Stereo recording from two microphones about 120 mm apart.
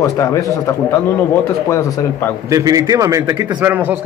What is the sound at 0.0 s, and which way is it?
Speech, 25° left (ahead or behind).